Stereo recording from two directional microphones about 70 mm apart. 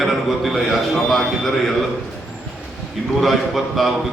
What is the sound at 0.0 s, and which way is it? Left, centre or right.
A man's voice, centre.